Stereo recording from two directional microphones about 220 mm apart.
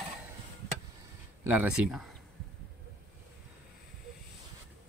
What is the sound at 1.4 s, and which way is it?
Speech, 5° right (ahead or behind).